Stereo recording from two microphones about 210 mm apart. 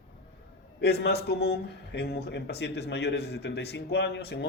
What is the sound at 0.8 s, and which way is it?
A man's voice, 50° left (ahead or behind).